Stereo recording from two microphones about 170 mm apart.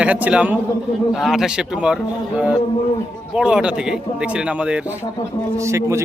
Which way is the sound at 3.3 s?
5° right (ahead or behind).